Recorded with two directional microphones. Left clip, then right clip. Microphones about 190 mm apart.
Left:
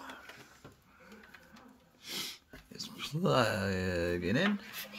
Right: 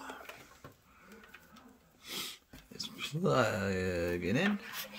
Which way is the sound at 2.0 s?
5° left (ahead or behind).